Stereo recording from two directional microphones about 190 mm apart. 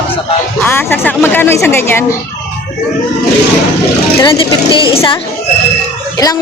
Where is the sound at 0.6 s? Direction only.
10° left (ahead or behind).